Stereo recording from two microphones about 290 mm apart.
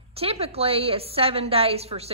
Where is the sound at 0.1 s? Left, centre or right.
Centre.